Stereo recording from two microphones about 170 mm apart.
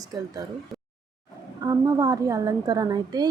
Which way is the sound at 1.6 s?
20° right (ahead or behind).